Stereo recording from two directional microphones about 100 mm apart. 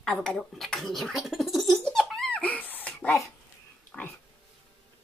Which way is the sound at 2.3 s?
15° left (ahead or behind).